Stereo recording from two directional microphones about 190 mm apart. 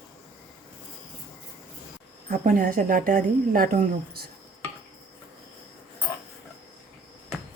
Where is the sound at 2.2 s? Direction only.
45° right (ahead or behind).